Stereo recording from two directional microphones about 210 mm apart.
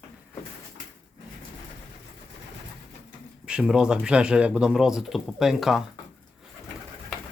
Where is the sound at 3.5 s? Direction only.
5° right (ahead or behind).